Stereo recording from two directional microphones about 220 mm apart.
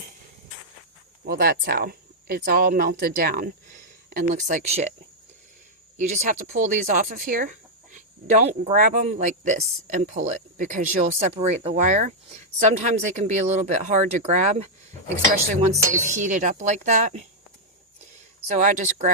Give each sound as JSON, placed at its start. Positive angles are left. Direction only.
{"t": 1.2, "sound": "speech", "side_deg": -45}
{"t": 6.0, "sound": "speech", "side_deg": -35}
{"t": 16.0, "sound": "speech", "side_deg": -35}
{"t": 18.4, "sound": "speech", "side_deg": -35}